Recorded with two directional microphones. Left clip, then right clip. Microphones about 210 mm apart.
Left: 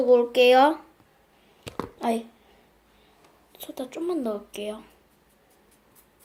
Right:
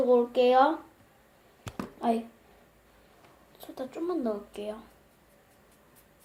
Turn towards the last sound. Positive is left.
turn(degrees=40)  # may be behind; listen again after turning